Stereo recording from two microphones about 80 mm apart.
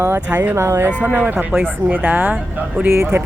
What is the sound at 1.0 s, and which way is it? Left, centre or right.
Speech, right.